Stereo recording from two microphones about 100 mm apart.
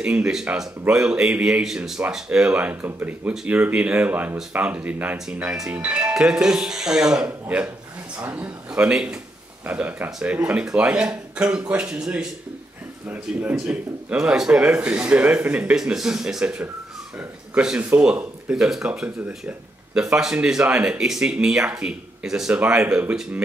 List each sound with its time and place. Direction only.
0.0 s speech: 10° right (ahead or behind)
13.1 s speech: 20° right (ahead or behind)